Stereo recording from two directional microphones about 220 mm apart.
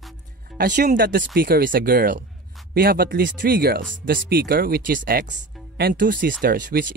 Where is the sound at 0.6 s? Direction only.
35° right (ahead or behind).